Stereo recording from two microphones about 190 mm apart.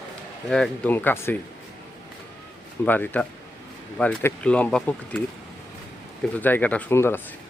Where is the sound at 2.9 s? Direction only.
10° left (ahead or behind).